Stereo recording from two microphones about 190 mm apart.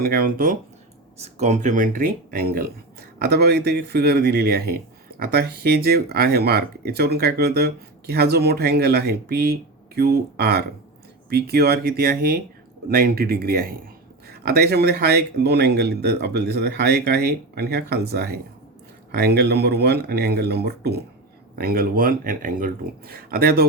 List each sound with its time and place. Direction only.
0.0 s speech: 50° right (ahead or behind)
1.2 s speech: 35° right (ahead or behind); by 23.6 s 55° right (ahead or behind)